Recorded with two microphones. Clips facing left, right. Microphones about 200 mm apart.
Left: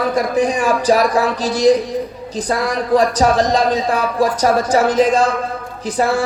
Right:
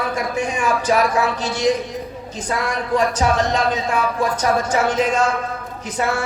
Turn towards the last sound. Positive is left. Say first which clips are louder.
# left 5 dB
turn(degrees=35)  # may be behind; listen again after turning